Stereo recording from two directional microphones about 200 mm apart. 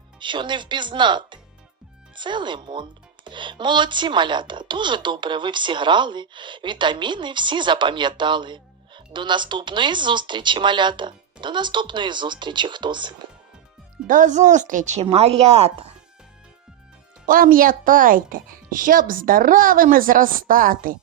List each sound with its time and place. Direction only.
0.2 s speech: 25° right (ahead or behind)
14.1 s speech: 40° right (ahead or behind)
17.2 s a woman's voice: 45° right (ahead or behind)